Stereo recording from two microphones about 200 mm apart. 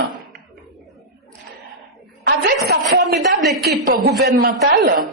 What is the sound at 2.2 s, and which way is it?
A woman's voice, 55° right (ahead or behind).